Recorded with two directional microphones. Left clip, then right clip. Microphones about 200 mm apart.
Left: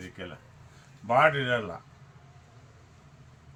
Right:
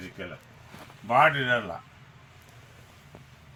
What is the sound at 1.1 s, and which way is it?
Speech, 30° left (ahead or behind).